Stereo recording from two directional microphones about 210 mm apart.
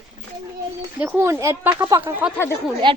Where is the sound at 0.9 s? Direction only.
5° right (ahead or behind).